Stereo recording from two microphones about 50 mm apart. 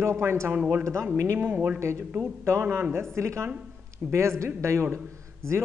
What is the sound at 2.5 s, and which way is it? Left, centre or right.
Speech, right.